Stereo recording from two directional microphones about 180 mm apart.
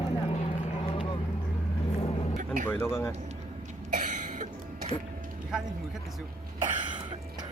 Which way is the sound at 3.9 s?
45° right (ahead or behind).